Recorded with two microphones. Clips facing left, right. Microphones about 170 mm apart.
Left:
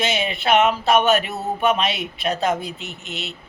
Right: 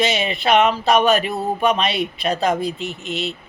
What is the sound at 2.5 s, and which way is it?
Speech, 35° right (ahead or behind).